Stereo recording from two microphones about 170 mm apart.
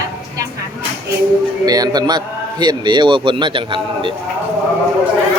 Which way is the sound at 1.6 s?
20° right (ahead or behind).